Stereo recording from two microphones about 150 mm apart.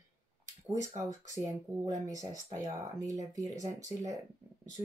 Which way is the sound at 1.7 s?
20° right (ahead or behind).